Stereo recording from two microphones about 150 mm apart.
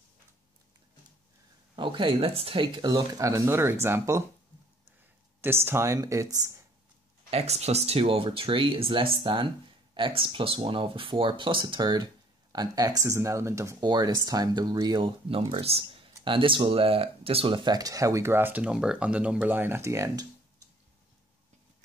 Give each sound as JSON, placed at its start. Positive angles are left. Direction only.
{"t": 1.8, "sound": "speech", "side_deg": -35}
{"t": 5.4, "sound": "speech", "side_deg": -15}
{"t": 7.2, "sound": "speech", "side_deg": -45}